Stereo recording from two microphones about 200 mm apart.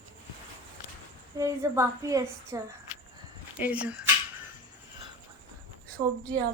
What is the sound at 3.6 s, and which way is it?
Speech, 5° right (ahead or behind).